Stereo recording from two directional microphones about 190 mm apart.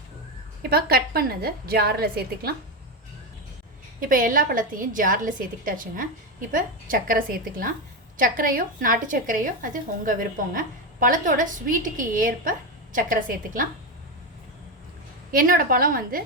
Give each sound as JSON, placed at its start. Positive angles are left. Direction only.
{"t": 0.7, "sound": "a woman's voice", "side_deg": -55}
{"t": 4.0, "sound": "a woman's voice", "side_deg": -45}
{"t": 15.3, "sound": "a woman's voice", "side_deg": -45}